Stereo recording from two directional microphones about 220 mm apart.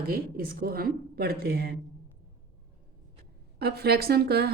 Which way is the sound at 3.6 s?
45° right (ahead or behind).